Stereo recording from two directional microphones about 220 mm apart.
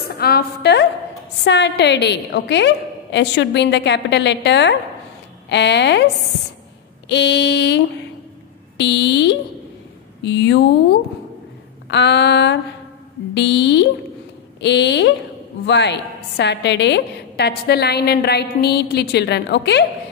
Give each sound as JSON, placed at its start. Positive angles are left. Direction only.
{"t": 0.1, "sound": "a woman's voice", "side_deg": 45}
{"t": 7.1, "sound": "a woman's voice", "side_deg": 50}